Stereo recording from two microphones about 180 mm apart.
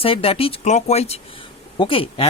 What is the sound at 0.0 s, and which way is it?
Speech, 30° left (ahead or behind).